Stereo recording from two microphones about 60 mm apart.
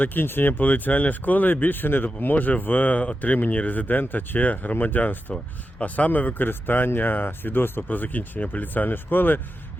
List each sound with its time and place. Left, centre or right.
0.0 s speech: left